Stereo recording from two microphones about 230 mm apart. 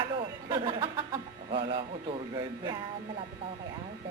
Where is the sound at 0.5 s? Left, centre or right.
Right.